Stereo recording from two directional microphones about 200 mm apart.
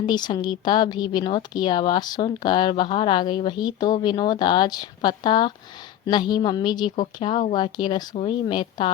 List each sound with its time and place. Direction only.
0.0 s speech: 20° left (ahead or behind)